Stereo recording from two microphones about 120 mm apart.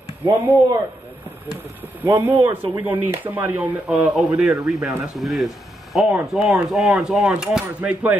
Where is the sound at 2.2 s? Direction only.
20° right (ahead or behind).